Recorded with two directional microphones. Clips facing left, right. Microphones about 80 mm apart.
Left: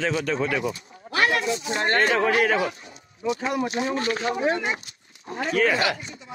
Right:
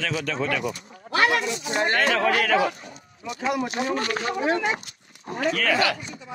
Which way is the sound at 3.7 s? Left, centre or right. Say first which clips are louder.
Even; right.